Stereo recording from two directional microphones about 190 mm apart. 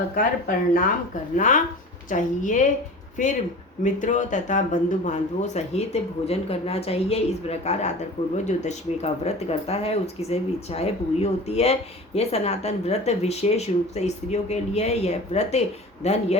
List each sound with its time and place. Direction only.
0.1 s speech: 45° left (ahead or behind)